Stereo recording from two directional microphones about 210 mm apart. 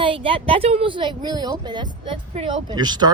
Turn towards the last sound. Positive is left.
turn(degrees=-20)  # may be behind; listen again after turning